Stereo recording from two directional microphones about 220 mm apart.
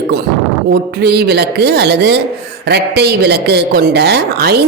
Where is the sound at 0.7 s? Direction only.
45° right (ahead or behind).